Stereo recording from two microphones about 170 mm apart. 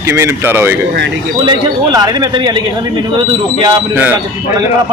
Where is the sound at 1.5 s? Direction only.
25° right (ahead or behind).